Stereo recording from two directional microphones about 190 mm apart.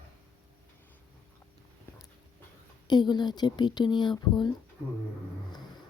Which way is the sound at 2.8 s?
20° left (ahead or behind).